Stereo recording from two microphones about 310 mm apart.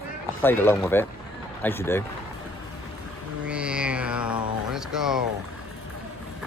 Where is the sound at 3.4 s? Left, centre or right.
Centre.